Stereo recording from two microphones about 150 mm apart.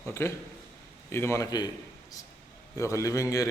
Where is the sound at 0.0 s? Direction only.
15° left (ahead or behind).